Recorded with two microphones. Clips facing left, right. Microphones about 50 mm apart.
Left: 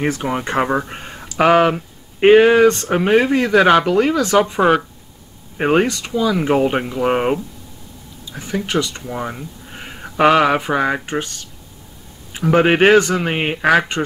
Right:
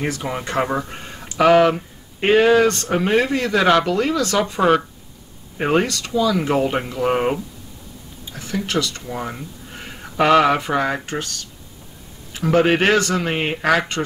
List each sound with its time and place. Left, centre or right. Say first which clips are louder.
0.0 s a man's voice: left 4 dB; left
8.4 s a man's voice: left 2 dB; centre